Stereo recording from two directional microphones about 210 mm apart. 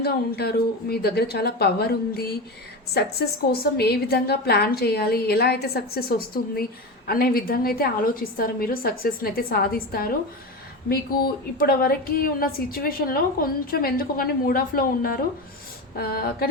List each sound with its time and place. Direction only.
0.0 s a woman's voice: 50° left (ahead or behind)
11.5 s a woman's voice: 45° left (ahead or behind)